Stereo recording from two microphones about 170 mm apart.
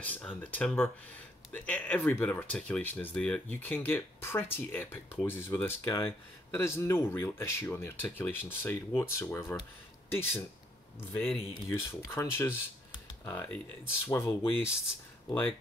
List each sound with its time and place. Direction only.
0.0 s speech: 10° left (ahead or behind)